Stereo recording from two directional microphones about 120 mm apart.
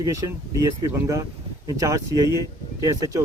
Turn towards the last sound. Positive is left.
turn(degrees=-25)  # may be behind; listen again after turning